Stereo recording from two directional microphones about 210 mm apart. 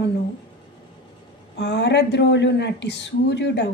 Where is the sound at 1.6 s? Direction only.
55° left (ahead or behind).